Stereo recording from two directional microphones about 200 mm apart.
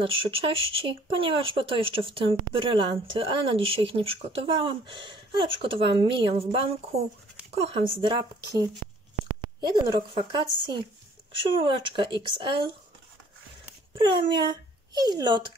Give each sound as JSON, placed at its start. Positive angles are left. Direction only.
{"t": 0.0, "sound": "speech", "side_deg": -25}
{"t": 13.9, "sound": "speech", "side_deg": -25}